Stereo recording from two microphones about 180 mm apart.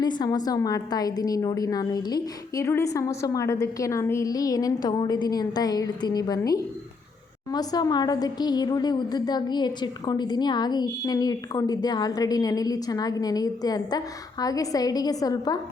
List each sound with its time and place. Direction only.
0.0 s a woman's voice: 25° left (ahead or behind)